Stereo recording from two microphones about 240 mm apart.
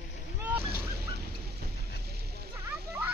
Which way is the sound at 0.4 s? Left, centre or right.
Centre.